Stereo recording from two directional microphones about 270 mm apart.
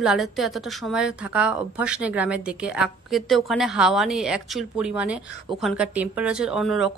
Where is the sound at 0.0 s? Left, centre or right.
Centre.